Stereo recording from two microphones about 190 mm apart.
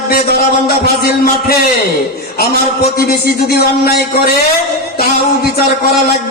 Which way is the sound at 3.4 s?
55° left (ahead or behind).